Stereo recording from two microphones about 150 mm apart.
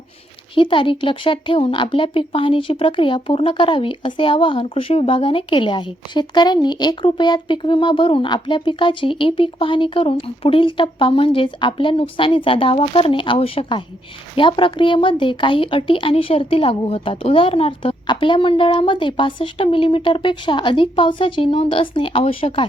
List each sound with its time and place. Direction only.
0.5 s speech: 35° left (ahead or behind)